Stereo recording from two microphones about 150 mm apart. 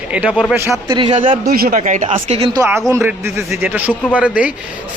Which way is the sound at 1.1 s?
60° right (ahead or behind).